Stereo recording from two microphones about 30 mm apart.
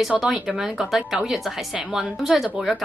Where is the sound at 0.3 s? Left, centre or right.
Centre.